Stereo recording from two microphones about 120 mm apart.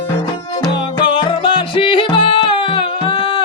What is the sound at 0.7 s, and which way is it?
Music, 45° left (ahead or behind).